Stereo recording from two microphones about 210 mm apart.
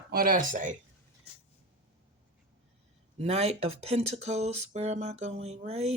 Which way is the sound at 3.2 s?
30° right (ahead or behind).